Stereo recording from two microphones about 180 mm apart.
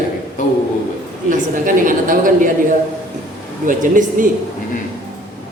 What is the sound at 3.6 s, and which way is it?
Speech, 45° right (ahead or behind).